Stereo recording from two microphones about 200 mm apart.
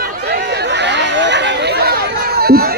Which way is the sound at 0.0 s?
50° right (ahead or behind).